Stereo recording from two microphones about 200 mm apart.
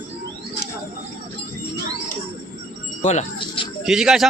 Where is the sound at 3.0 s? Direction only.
35° left (ahead or behind).